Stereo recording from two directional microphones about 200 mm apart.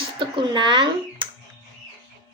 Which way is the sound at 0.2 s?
25° right (ahead or behind).